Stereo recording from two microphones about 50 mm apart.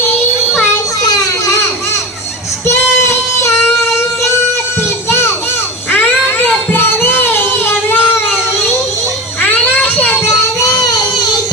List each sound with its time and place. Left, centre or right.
2.6 s child singing: left
4.8 s children playing: left
5.9 s music: left
9.4 s children playing: left
10.2 s child singing: left